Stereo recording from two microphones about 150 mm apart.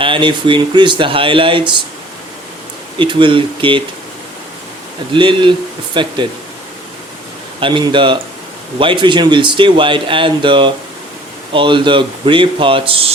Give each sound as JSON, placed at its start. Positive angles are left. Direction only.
{"t": 0.0, "sound": "speech", "side_deg": -35}
{"t": 3.0, "sound": "speech", "side_deg": -35}
{"t": 5.1, "sound": "speech", "side_deg": -35}
{"t": 7.6, "sound": "speech", "side_deg": -35}